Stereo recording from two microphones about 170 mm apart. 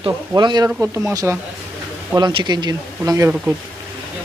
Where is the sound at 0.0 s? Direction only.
25° right (ahead or behind).